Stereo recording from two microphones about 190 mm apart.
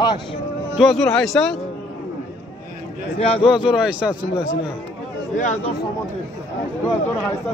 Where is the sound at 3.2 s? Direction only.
30° left (ahead or behind).